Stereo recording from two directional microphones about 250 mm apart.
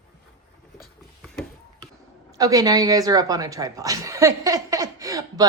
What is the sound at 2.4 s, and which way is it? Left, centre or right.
A woman's voice, centre.